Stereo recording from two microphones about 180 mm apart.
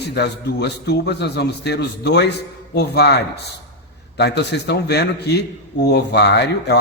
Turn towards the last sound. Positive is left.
turn(degrees=70)  # may be behind; listen again after turning